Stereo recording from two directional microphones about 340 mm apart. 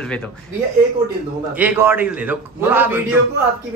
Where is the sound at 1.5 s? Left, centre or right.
Centre.